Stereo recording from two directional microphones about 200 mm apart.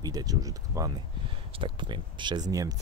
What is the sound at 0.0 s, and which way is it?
Speech, 20° right (ahead or behind).